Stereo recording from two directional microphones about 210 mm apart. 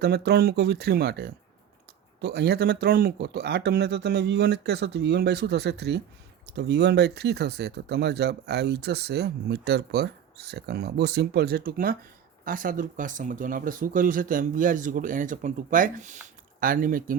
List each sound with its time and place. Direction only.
0.0 s speech: 50° right (ahead or behind)